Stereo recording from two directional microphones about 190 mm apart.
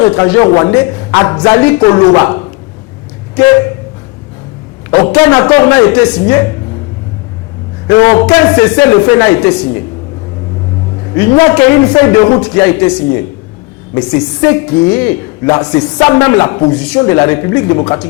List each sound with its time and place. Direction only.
0.0 s a woman's voice: 20° left (ahead or behind)
5.1 s a woman's voice: 15° left (ahead or behind)
7.9 s a woman's voice: 20° left (ahead or behind)
11.3 s a woman's voice: 15° left (ahead or behind)